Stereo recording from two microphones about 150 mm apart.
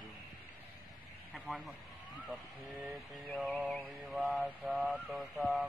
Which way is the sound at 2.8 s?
Centre (ahead or behind).